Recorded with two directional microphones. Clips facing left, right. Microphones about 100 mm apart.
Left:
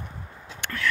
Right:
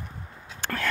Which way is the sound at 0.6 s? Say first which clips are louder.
Left 1 dB; 40° right (ahead or behind).